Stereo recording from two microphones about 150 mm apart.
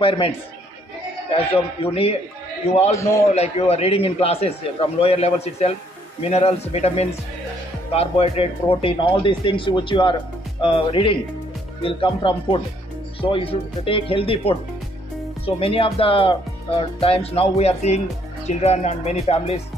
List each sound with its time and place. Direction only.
1.3 s a man's voice: 40° left (ahead or behind)
3.0 s a man's voice: 20° left (ahead or behind)
3.3 s a man's voice: 45° left (ahead or behind)